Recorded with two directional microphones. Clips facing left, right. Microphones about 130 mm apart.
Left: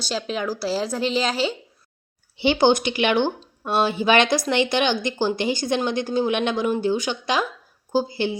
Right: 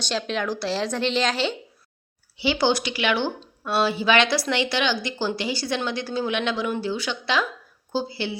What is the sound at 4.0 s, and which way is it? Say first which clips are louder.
Speech: left 3 dB; 50° left (ahead or behind).